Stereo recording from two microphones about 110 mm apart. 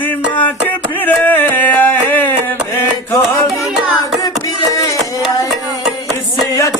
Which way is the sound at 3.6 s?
5° right (ahead or behind).